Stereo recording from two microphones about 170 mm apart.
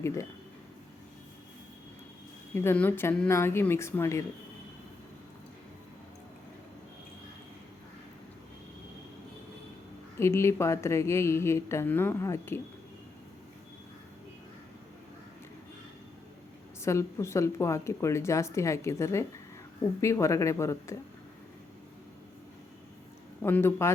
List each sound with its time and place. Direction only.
2.6 s a woman's voice: 10° left (ahead or behind)
10.2 s a woman's voice: 15° left (ahead or behind)
16.8 s a woman's voice: 15° left (ahead or behind)
23.4 s a woman's voice: 15° left (ahead or behind)